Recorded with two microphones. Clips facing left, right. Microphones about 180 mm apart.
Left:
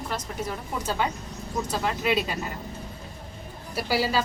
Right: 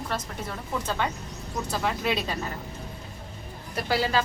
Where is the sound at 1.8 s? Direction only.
Centre (ahead or behind).